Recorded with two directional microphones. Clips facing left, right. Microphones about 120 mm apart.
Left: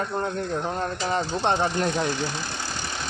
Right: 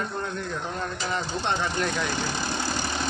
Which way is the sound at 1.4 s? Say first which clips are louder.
Left 6 dB; 45° left (ahead or behind).